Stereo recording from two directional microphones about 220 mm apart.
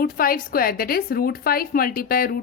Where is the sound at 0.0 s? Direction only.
40° left (ahead or behind).